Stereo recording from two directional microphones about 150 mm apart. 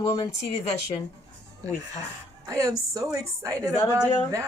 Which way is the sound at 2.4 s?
20° right (ahead or behind).